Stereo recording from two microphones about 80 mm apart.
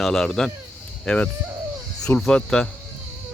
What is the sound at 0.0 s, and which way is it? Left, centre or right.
Speech, centre.